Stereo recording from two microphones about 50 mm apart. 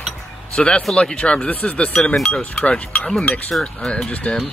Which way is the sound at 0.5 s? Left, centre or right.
Left.